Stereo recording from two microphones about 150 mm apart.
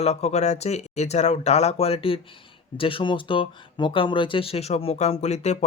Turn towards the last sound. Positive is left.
turn(degrees=50)  # may be behind; listen again after turning